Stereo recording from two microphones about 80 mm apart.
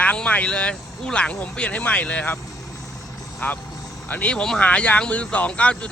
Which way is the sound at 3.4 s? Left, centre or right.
Left.